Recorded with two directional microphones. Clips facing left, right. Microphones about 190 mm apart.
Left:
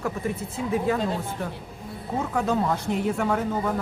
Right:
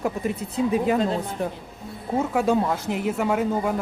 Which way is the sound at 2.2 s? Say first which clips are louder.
Right 3 dB; 10° right (ahead or behind).